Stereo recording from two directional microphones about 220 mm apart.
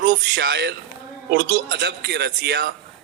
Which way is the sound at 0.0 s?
40° right (ahead or behind).